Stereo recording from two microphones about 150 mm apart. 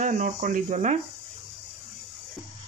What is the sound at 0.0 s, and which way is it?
Speech, 60° right (ahead or behind).